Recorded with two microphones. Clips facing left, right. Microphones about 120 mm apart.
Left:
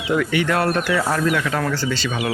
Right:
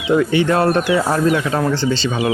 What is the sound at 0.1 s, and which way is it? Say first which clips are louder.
Speech: right 5 dB; 30° right (ahead or behind).